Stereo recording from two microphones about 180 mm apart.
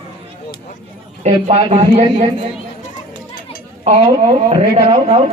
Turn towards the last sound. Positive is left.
turn(degrees=-35)  # may be behind; listen again after turning